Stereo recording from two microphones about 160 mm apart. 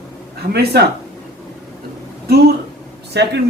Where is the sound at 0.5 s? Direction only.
90° right.